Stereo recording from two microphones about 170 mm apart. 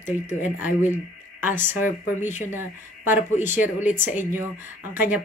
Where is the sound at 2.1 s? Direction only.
45° left (ahead or behind).